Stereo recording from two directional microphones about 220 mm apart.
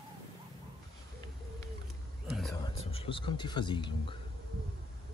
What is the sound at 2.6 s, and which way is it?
Speech, 25° left (ahead or behind).